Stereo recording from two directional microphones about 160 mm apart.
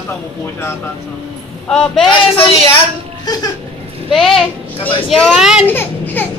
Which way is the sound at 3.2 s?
25° left (ahead or behind).